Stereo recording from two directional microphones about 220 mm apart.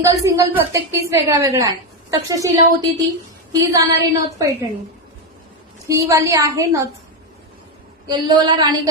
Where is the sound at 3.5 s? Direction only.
15° right (ahead or behind).